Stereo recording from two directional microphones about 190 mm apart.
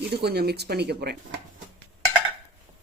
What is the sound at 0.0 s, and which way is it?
Speech, 60° right (ahead or behind).